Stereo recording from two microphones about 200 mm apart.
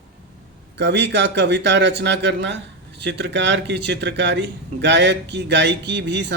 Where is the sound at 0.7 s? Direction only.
60° right (ahead or behind).